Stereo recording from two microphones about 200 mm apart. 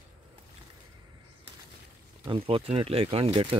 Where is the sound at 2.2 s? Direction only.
25° right (ahead or behind).